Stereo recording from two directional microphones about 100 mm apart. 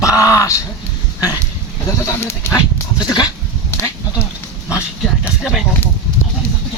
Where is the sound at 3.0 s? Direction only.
40° left (ahead or behind).